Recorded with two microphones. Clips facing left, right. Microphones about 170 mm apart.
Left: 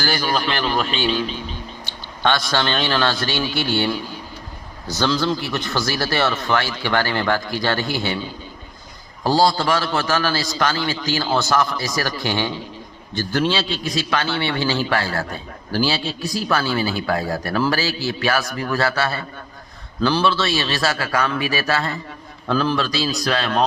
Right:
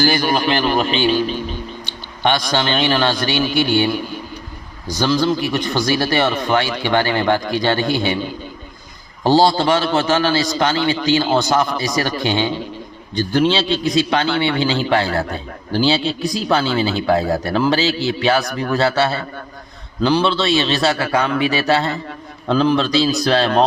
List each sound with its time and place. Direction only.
0.3 s speech: 15° right (ahead or behind)
2.2 s speech: 15° right (ahead or behind)
9.2 s a man's voice: 25° right (ahead or behind)